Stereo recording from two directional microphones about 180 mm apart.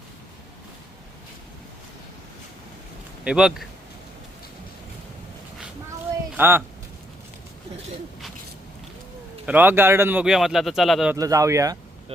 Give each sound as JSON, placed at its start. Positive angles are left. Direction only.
{"t": 3.2, "sound": "a man's voice", "side_deg": -5}
{"t": 6.3, "sound": "speech", "side_deg": -10}
{"t": 9.5, "sound": "a man's voice", "side_deg": -10}
{"t": 11.1, "sound": "speech", "side_deg": -20}